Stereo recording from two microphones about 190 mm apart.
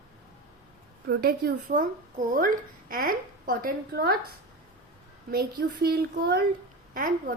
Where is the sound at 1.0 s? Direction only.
55° right (ahead or behind).